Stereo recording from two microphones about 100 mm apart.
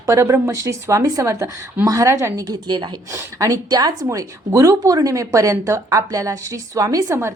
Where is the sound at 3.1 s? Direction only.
30° right (ahead or behind).